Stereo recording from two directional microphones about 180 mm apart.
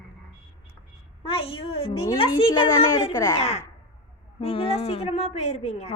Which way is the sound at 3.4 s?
35° left (ahead or behind).